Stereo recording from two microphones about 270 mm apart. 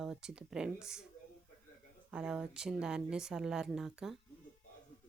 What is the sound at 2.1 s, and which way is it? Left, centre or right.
A woman's voice, centre.